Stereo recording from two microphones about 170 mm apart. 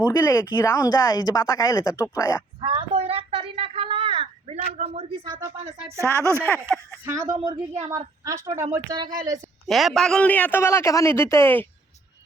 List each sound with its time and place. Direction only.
0.0 s a man's voice: 15° left (ahead or behind)
2.6 s a sound: 30° right (ahead or behind)
5.2 s a woman's voice: 20° right (ahead or behind)
7.3 s a woman's voice: 30° right (ahead or behind)
7.9 s a woman's voice: 20° right (ahead or behind)
9.6 s a man's voice: centre (ahead or behind)